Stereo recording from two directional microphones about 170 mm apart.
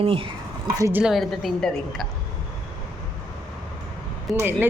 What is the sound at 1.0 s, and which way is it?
A woman's voice, centre (ahead or behind).